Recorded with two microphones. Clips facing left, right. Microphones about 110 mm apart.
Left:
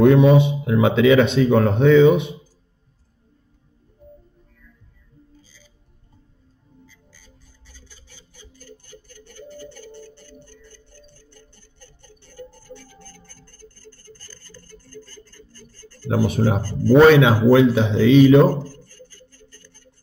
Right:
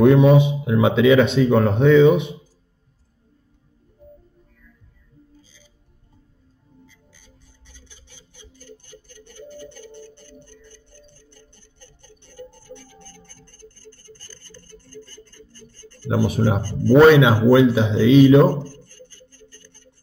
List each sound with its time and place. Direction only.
0.0 s speech: 5° right (ahead or behind)
12.2 s music: 20° right (ahead or behind)
14.8 s a sound: 25° right (ahead or behind)
16.1 s speech: 10° right (ahead or behind)